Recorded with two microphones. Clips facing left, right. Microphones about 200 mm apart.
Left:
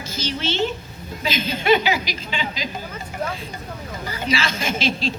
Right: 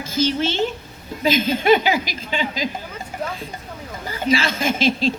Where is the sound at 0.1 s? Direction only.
50° right (ahead or behind).